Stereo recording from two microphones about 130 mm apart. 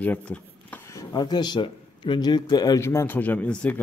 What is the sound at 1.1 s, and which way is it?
Speech, 35° left (ahead or behind).